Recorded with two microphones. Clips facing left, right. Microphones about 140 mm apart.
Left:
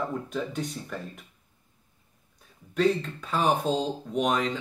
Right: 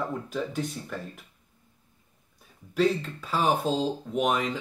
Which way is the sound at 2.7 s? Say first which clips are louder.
Even; 5° right (ahead or behind).